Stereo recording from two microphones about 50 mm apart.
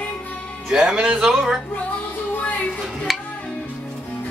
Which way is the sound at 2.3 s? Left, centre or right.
Left.